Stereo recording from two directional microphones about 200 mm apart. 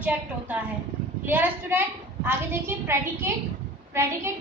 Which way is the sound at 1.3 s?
10° right (ahead or behind).